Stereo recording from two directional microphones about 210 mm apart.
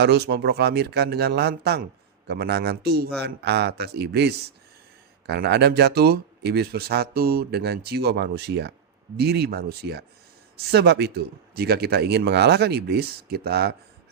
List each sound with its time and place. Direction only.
0.0 s speech: 50° right (ahead or behind)